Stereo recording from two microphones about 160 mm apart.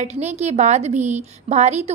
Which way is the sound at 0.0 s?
45° right (ahead or behind).